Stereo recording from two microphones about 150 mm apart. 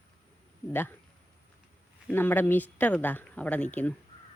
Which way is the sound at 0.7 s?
15° left (ahead or behind).